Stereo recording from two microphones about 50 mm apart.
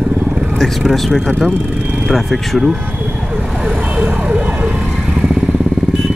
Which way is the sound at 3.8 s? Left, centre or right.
Right.